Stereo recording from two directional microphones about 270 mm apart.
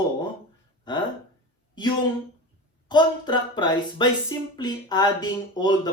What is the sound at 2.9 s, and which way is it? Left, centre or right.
Speech, centre.